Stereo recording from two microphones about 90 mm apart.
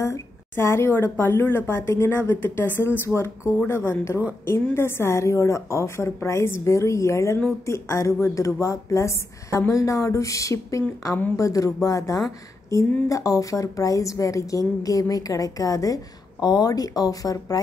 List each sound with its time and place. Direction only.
0.0 s a woman's voice: 30° left (ahead or behind)